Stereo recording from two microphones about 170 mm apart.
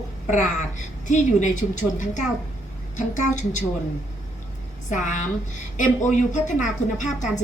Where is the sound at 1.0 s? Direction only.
45° left (ahead or behind).